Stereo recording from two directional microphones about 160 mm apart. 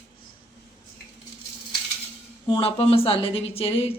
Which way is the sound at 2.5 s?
35° left (ahead or behind).